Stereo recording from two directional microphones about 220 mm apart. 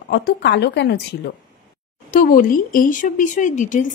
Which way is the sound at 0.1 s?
50° left (ahead or behind).